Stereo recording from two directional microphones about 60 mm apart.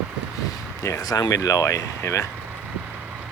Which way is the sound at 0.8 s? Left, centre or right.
Left.